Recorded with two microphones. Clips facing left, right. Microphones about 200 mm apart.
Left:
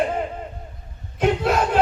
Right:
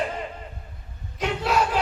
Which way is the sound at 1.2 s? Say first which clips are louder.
Left 4 dB; 50° left (ahead or behind).